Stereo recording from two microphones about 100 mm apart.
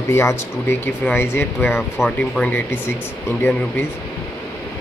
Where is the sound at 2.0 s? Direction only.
10° left (ahead or behind).